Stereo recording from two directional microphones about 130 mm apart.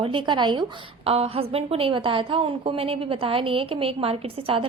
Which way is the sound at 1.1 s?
50° right (ahead or behind).